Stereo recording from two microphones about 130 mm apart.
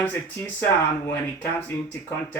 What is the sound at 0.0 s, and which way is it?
Speech, 15° left (ahead or behind).